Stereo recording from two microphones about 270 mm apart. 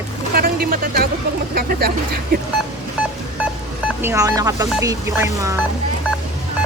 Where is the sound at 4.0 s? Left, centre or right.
Centre.